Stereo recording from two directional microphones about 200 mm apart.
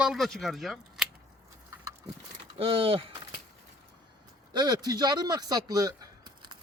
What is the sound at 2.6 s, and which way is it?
Speech, 30° right (ahead or behind).